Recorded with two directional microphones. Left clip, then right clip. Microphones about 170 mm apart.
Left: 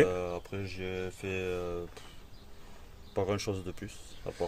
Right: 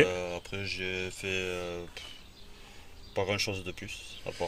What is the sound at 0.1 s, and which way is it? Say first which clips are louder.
Speech: even; 65° left (ahead or behind).